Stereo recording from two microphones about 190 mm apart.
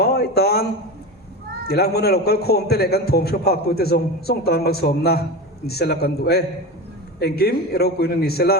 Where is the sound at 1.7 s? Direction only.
55° left (ahead or behind).